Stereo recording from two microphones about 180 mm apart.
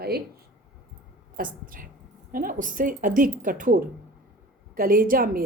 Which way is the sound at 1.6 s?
50° right (ahead or behind).